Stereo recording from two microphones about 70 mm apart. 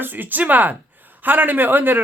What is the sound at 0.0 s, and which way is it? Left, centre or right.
A man's voice, right.